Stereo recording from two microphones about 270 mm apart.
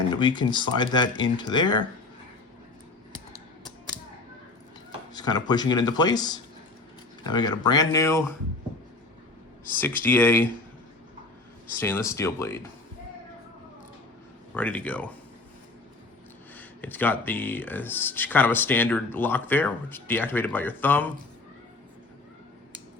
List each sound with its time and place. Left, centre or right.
0.1 s speech: centre
5.1 s speech: centre
9.7 s speech: centre
11.8 s speech: centre
14.5 s speech: centre
16.6 s speech: centre